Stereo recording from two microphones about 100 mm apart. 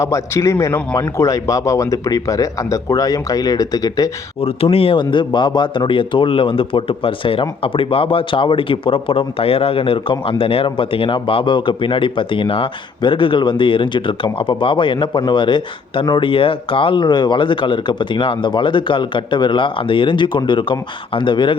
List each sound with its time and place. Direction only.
0.0 s a man's voice: 30° left (ahead or behind)
4.4 s a man's voice: 75° left (ahead or behind); by 21.5 s 55° left (ahead or behind)